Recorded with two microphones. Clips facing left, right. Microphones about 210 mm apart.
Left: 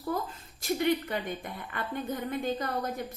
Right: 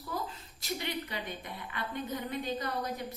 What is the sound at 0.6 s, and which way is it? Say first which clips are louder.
A woman's voice: left 9 dB; 50° left (ahead or behind).